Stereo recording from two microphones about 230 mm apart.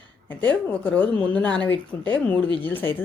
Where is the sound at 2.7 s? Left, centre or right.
Centre.